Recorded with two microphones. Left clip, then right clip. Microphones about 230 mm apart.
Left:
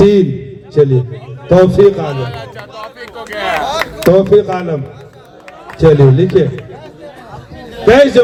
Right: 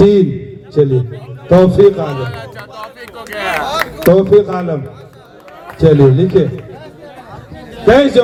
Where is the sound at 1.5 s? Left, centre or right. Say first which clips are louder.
Even; left.